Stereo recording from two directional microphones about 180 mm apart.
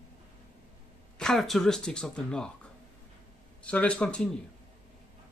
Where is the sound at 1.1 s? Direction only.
Centre (ahead or behind).